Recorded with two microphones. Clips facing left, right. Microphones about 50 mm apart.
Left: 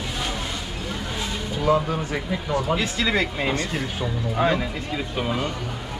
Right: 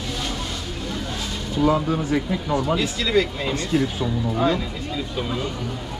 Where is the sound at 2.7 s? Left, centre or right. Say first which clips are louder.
Right 3 dB; left.